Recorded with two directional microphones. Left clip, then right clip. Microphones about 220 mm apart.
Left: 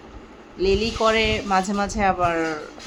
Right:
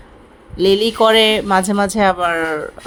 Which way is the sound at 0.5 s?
30° right (ahead or behind).